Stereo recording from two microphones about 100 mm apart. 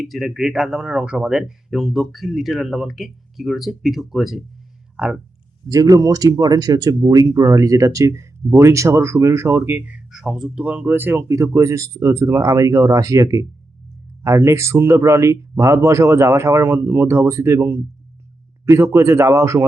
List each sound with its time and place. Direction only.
0.0 s speech: centre (ahead or behind)
5.6 s speech: 40° right (ahead or behind)